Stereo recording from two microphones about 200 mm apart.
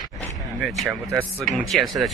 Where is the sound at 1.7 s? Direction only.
Centre (ahead or behind).